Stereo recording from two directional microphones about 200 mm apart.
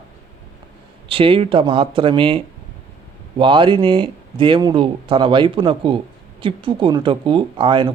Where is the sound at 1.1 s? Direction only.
25° right (ahead or behind).